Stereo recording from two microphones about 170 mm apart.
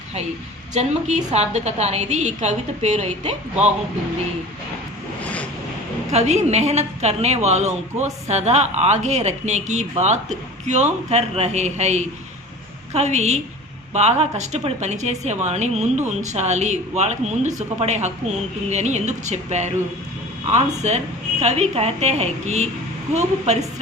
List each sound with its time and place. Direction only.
0.7 s speech: 45° right (ahead or behind)
6.1 s a woman's voice: 40° right (ahead or behind)